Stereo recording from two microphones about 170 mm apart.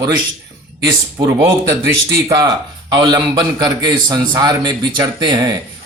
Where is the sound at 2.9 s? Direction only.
25° right (ahead or behind).